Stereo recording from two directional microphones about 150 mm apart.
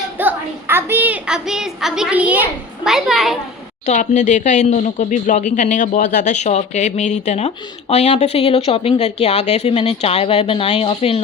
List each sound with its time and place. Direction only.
0.2 s a woman's voice: 15° right (ahead or behind)
3.8 s speech: 50° left (ahead or behind)